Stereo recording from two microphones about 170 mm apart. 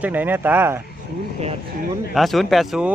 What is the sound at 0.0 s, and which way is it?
Speech, 10° right (ahead or behind).